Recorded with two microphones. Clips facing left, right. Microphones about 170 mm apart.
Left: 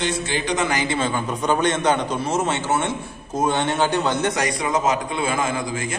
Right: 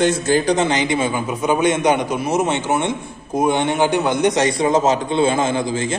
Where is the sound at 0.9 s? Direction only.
10° right (ahead or behind).